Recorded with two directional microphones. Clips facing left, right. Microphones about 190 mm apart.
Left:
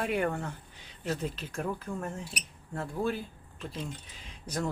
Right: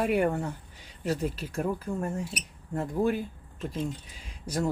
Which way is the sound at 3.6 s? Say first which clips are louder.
Right 6 dB; 45° right (ahead or behind).